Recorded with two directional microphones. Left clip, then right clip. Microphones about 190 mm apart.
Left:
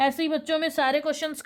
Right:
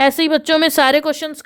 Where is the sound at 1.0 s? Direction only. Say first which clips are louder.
Right 7 dB; 30° right (ahead or behind).